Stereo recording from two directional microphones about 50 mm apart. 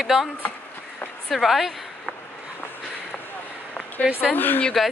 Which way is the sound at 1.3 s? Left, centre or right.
Centre.